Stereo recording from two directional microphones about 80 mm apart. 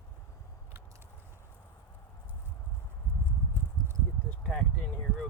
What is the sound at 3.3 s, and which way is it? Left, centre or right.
Clip-clop, right.